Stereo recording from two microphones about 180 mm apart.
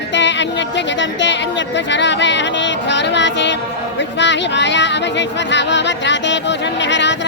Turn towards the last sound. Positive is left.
turn(degrees=80)